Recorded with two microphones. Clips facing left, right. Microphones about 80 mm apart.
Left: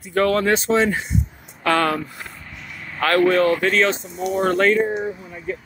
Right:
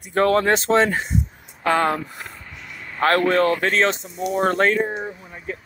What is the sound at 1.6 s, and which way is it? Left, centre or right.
Speech, right.